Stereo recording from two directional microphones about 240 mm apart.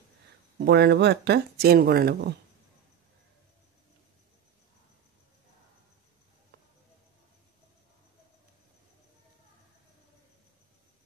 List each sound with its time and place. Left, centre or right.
0.6 s speech: right